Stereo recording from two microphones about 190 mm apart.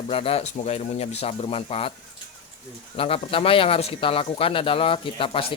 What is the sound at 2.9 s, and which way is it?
Speech, 30° left (ahead or behind).